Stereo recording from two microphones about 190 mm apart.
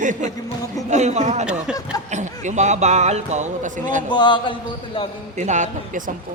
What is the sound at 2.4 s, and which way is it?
Speech, 40° right (ahead or behind).